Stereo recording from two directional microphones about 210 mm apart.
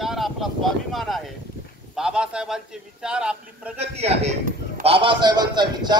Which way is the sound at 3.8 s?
30° right (ahead or behind).